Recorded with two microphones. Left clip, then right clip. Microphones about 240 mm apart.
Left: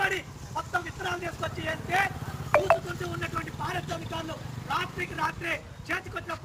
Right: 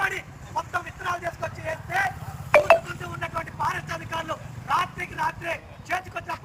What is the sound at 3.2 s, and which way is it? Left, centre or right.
A man's voice, centre.